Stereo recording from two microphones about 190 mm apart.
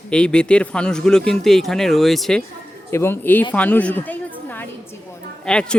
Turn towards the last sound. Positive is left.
turn(degrees=5)  # may be behind; listen again after turning